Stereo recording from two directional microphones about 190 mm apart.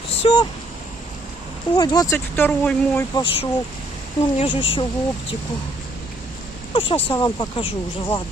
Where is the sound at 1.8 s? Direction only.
20° left (ahead or behind).